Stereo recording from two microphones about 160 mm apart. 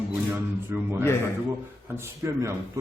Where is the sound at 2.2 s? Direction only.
15° right (ahead or behind).